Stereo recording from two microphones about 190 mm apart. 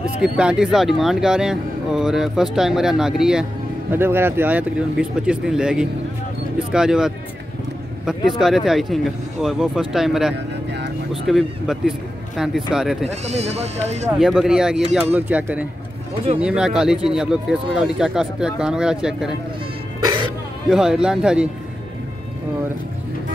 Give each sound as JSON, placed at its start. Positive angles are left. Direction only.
{"t": 0.2, "sound": "speech", "side_deg": -5}
{"t": 8.3, "sound": "speech", "side_deg": 0}
{"t": 10.3, "sound": "vehicle", "side_deg": -65}
{"t": 11.2, "sound": "speech", "side_deg": 0}
{"t": 13.0, "sound": "speech", "side_deg": -35}
{"t": 14.1, "sound": "speech", "side_deg": 0}
{"t": 20.7, "sound": "speech", "side_deg": -5}